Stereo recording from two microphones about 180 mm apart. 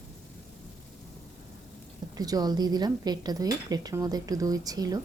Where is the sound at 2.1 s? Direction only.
20° right (ahead or behind).